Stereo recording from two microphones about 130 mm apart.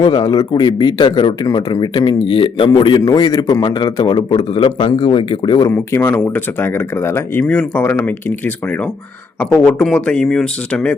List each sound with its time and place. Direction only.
0.0 s a man's voice: 35° left (ahead or behind)
5.7 s speech: 15° left (ahead or behind)
9.6 s speech: 10° left (ahead or behind)